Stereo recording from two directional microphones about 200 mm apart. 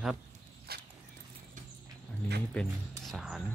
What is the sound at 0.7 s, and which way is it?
Horse, 50° right (ahead or behind).